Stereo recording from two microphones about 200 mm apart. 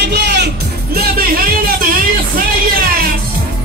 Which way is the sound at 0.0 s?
55° right (ahead or behind).